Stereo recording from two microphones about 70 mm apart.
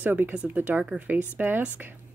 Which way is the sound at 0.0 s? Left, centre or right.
Right.